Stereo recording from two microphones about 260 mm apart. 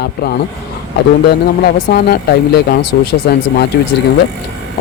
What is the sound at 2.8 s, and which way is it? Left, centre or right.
Speech, left.